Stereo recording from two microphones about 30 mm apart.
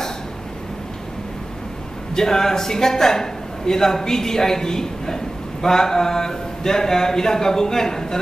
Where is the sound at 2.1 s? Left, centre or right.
Centre.